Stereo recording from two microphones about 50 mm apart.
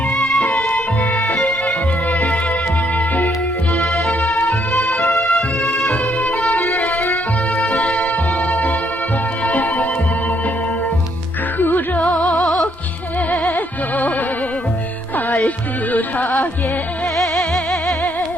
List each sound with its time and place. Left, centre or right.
0.2 s music: left
3.8 s music: left
7.6 s music: left
12.0 s music: centre
15.4 s music: left
17.3 s music: centre